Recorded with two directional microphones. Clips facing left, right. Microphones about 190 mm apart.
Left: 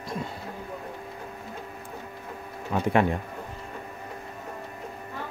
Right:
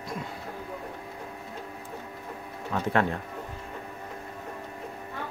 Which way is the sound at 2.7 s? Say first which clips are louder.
Left 3 dB; 15° left (ahead or behind).